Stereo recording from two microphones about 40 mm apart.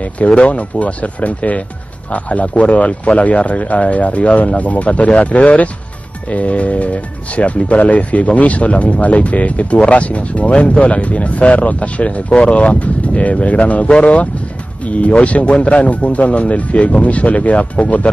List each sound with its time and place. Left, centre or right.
0.0 s speech: left